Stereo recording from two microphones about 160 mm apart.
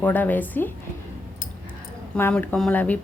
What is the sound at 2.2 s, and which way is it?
Speech, 10° left (ahead or behind).